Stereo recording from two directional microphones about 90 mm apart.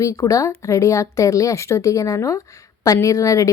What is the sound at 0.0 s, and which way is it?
A woman's voice, 35° left (ahead or behind).